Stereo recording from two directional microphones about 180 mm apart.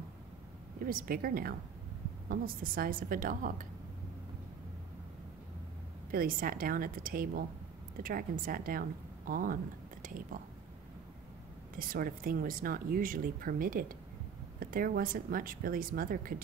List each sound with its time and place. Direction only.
0.8 s speech: 50° right (ahead or behind)
6.1 s speech: 55° right (ahead or behind)
11.7 s speech: 50° right (ahead or behind)